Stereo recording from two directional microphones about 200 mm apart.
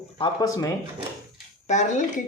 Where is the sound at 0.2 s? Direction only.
15° left (ahead or behind).